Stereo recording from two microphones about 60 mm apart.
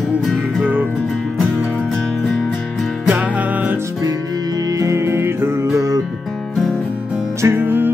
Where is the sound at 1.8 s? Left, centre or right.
Centre.